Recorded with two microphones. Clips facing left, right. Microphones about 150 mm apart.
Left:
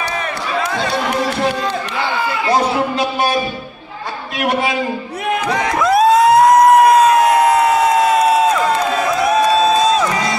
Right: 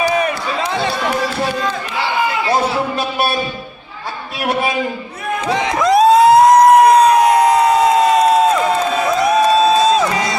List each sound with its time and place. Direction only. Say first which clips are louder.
5.6 s crowd: even; 20° right (ahead or behind)
5.9 s a sound: right 2 dB; centre (ahead or behind)
9.2 s music: right 1 dB; centre (ahead or behind)